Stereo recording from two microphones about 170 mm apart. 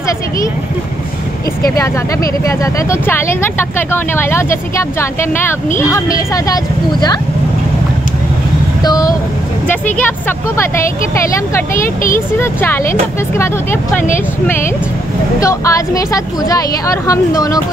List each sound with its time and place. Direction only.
2.4 s a woman's voice: 15° left (ahead or behind)
8.8 s a woman's voice: 20° left (ahead or behind)
11.7 s speech: 55° left (ahead or behind)
12.4 s speech: 15° left (ahead or behind)
15.4 s a woman's voice: 20° left (ahead or behind)